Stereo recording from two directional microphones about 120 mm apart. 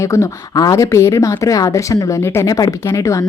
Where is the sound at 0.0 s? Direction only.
25° left (ahead or behind).